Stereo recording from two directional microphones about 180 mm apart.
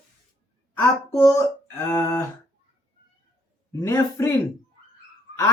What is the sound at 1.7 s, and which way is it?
Speech, 15° left (ahead or behind).